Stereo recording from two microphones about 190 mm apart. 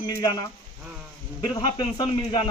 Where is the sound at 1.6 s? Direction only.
25° left (ahead or behind).